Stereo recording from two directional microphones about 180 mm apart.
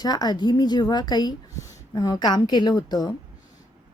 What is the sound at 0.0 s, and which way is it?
A woman's voice, 20° left (ahead or behind).